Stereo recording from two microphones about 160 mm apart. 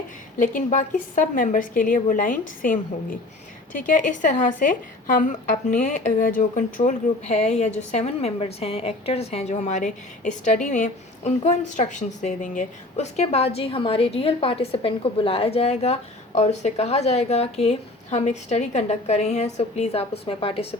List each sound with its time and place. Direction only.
0.3 s a woman's voice: 55° left (ahead or behind); by 20.7 s 35° left (ahead or behind)